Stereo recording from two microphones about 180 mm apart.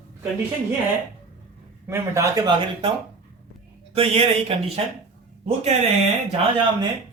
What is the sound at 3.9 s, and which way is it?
Speech, 30° right (ahead or behind).